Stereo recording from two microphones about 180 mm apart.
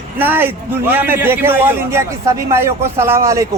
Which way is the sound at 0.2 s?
10° right (ahead or behind).